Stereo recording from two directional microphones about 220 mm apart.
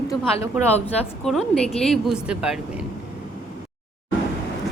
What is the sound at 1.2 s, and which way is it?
A woman's voice, centre (ahead or behind).